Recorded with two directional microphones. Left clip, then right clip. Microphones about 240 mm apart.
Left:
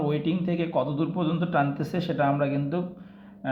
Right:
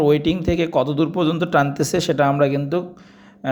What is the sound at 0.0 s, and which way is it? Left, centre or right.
Speech, right.